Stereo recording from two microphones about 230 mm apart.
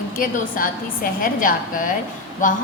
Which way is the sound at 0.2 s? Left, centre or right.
Left.